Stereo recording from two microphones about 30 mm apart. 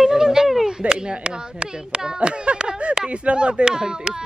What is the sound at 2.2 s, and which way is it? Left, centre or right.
Speech, right.